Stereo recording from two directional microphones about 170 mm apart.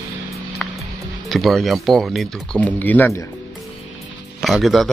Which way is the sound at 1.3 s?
Centre (ahead or behind).